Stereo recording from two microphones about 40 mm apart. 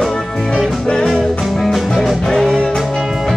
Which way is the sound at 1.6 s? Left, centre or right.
Centre.